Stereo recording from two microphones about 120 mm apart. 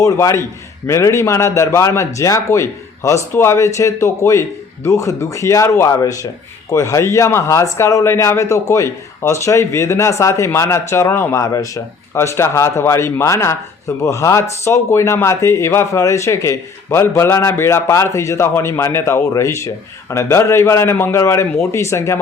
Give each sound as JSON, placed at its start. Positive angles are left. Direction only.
{"t": 0.0, "sound": "speech", "side_deg": 25}